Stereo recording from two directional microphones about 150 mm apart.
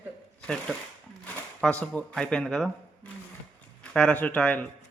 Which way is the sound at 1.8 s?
10° left (ahead or behind).